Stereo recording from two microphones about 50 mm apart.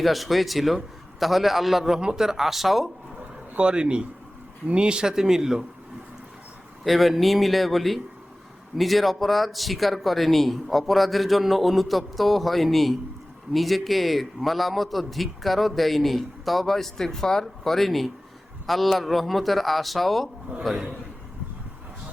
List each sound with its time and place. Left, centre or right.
0.0 s a man's voice: centre
3.6 s speech: right
6.8 s a man's voice: centre